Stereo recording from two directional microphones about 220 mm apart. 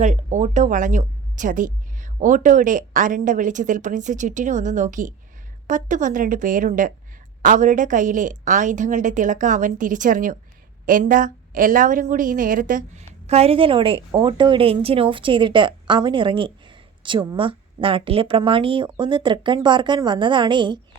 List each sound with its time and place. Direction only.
0.0 s a woman's voice: 30° right (ahead or behind)